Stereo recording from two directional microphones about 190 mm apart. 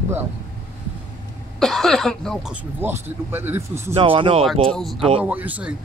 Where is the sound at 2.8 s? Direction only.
10° right (ahead or behind).